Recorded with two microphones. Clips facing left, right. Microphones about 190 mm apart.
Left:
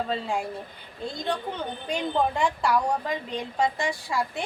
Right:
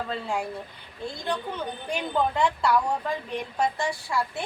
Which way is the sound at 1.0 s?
20° left (ahead or behind).